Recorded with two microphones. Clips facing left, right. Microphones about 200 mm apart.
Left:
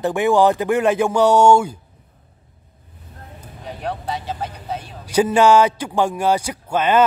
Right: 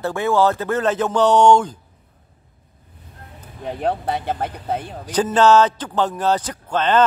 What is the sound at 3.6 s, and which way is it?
Speech, 55° right (ahead or behind).